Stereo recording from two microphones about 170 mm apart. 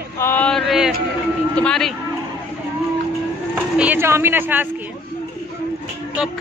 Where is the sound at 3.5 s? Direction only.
10° right (ahead or behind).